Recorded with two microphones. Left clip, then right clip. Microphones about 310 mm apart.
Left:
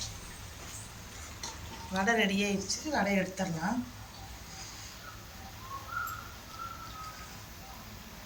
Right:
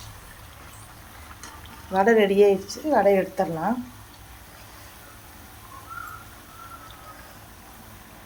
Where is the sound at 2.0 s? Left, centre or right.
Centre.